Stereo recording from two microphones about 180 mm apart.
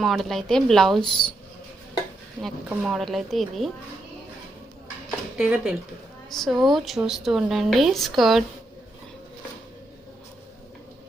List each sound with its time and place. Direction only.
0.0 s speech: centre (ahead or behind)
2.6 s speech: centre (ahead or behind)
5.4 s speech: 5° right (ahead or behind)